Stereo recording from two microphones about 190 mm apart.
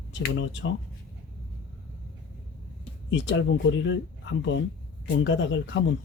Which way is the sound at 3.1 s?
70° left (ahead or behind).